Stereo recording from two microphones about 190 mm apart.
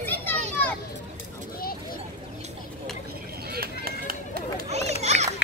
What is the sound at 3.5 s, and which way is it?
Run, 50° right (ahead or behind).